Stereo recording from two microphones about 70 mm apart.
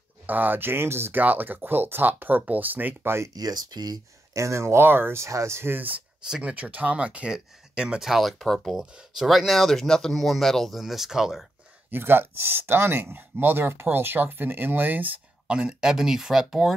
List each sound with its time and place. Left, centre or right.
0.3 s speech: right
3.3 s speech: right
4.3 s speech: right
6.2 s speech: centre
6.5 s speech: right
8.0 s speech: centre
11.9 s speech: right
15.4 s speech: centre